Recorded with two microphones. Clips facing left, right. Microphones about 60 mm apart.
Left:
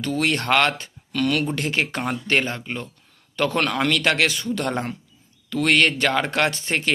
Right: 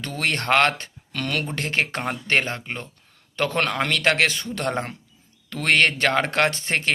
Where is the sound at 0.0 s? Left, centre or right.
Right.